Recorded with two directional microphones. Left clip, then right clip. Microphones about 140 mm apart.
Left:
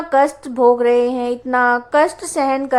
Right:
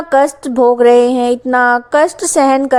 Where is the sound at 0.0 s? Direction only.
45° right (ahead or behind).